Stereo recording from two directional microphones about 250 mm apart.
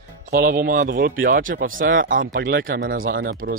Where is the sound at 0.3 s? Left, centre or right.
Right.